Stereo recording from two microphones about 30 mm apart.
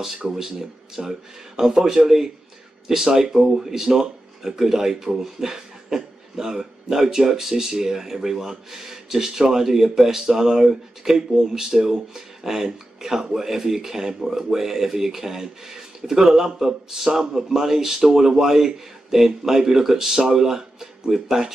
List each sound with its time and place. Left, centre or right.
0.0 s speech: centre
2.0 s speech: centre